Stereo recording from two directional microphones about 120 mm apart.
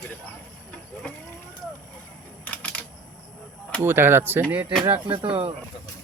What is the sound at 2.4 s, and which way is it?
Typewriter, 10° left (ahead or behind).